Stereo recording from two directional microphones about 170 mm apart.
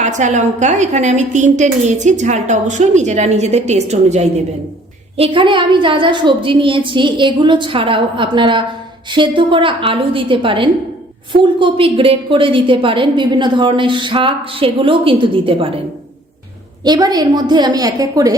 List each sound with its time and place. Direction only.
0.0 s a woman's voice: 45° right (ahead or behind)
16.8 s a woman's voice: 25° right (ahead or behind)